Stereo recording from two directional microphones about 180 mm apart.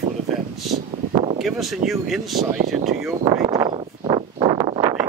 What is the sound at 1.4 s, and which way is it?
Speech, centre (ahead or behind).